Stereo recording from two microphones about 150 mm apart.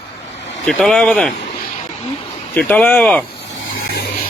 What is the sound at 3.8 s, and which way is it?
Vehicle, 90° left.